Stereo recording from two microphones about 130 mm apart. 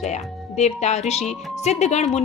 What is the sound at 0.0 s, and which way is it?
Speech, 60° left (ahead or behind).